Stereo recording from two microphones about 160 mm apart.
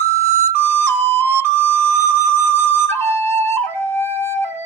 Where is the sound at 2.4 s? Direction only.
15° left (ahead or behind).